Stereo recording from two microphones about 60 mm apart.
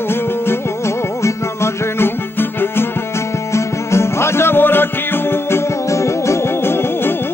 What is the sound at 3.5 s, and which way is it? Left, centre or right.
Music, left.